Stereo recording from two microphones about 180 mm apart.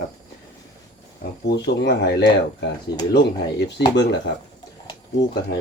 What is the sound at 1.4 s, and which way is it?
Speech, 70° left (ahead or behind).